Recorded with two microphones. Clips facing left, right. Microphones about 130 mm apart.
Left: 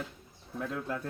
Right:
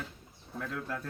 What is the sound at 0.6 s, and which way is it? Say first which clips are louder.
Speech: left 2 dB; 20° left (ahead or behind).